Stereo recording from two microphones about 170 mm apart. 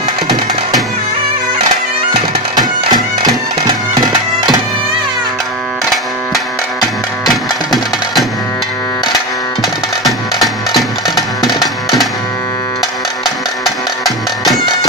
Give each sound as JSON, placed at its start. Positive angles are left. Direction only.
{"t": 2.5, "sound": "bagpipes", "side_deg": -25}
{"t": 7.2, "sound": "music", "side_deg": 0}
{"t": 9.6, "sound": "music", "side_deg": 0}
{"t": 13.2, "sound": "music", "side_deg": 0}